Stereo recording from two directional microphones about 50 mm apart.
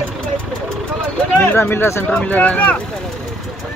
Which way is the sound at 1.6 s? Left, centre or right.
Left.